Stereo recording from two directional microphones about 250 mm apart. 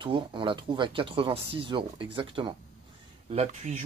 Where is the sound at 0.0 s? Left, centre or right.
Centre.